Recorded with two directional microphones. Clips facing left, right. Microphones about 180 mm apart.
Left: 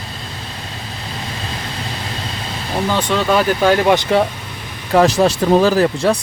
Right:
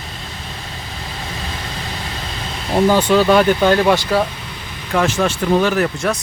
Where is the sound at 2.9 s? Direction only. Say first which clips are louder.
Right 3 dB; 5° right (ahead or behind); by 4.2 s 25° left (ahead or behind).